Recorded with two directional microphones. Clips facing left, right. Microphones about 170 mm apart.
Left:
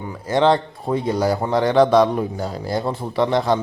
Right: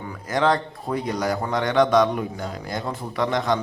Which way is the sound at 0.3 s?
30° left (ahead or behind).